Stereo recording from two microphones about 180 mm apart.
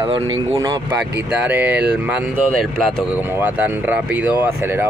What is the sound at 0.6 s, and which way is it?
Speech, 20° right (ahead or behind).